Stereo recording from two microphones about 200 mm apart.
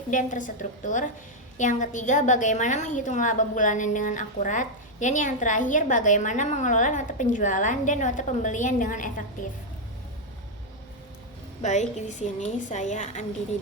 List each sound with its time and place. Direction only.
0.1 s a woman's voice: 40° left (ahead or behind)
11.6 s a woman's voice: 35° left (ahead or behind)